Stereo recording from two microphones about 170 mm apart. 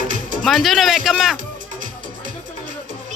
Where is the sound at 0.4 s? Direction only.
Centre (ahead or behind).